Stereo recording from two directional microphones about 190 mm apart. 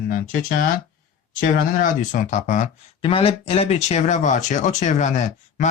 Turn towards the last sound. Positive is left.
turn(degrees=40)  # may be behind; listen again after turning